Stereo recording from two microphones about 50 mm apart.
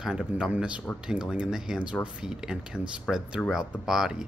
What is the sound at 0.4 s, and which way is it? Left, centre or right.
Speech, right.